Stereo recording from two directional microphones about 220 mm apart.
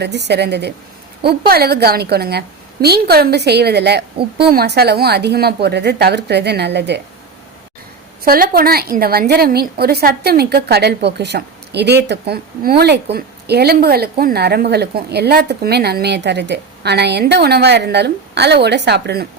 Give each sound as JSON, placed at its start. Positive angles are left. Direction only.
{"t": 0.0, "sound": "a woman's voice", "side_deg": -50}
{"t": 8.2, "sound": "a woman's voice", "side_deg": -40}